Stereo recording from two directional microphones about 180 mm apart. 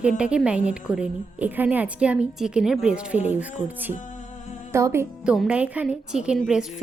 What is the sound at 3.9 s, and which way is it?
Music, 45° left (ahead or behind).